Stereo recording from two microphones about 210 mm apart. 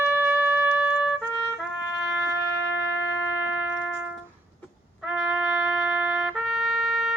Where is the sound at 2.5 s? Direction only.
55° left (ahead or behind).